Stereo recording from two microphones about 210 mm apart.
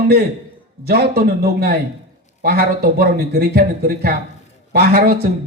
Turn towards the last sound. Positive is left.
turn(degrees=-45)  # may be behind; listen again after turning